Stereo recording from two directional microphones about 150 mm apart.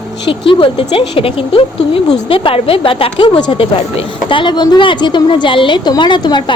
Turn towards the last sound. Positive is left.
turn(degrees=30)  # may be behind; listen again after turning